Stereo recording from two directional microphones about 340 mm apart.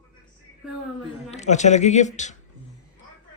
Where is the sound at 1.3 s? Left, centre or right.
Centre.